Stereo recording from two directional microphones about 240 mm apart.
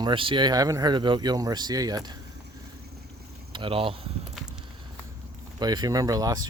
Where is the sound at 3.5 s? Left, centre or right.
Right.